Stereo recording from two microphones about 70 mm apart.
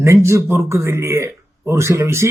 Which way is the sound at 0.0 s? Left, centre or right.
Right.